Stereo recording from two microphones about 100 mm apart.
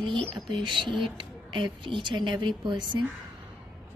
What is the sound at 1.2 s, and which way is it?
Speech, 55° right (ahead or behind).